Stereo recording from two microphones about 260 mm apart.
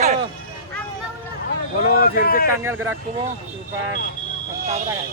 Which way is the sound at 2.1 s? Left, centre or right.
Left.